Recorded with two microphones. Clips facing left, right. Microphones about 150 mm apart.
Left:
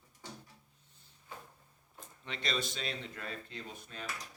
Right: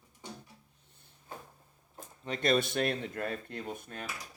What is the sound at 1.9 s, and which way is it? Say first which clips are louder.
Speech: right 7 dB; 40° right (ahead or behind).